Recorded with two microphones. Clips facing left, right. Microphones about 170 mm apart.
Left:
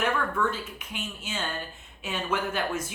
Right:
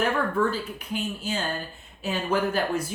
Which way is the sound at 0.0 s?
35° right (ahead or behind).